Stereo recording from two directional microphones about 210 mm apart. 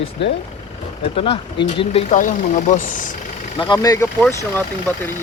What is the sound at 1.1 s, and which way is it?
Speech, 25° left (ahead or behind).